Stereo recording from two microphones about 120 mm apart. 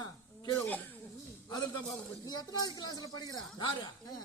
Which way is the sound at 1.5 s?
35° left (ahead or behind).